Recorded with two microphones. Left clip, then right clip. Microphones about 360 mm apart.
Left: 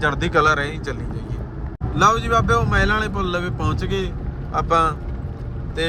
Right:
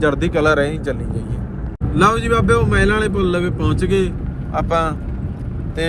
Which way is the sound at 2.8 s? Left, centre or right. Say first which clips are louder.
Right 3 dB; right.